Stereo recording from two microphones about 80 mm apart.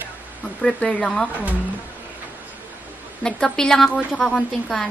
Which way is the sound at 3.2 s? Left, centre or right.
Centre.